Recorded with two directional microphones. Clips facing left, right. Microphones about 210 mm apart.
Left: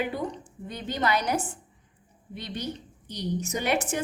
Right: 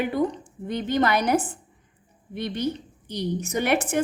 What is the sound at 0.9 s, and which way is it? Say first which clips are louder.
Speech: right 5 dB; 55° right (ahead or behind).